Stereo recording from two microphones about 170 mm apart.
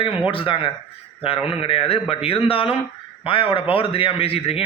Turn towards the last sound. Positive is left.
turn(degrees=35)  # may be behind; listen again after turning